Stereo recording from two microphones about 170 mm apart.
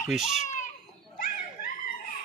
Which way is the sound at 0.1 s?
Centre (ahead or behind).